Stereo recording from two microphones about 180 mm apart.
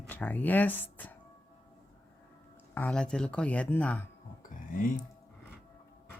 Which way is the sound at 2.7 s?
5° left (ahead or behind).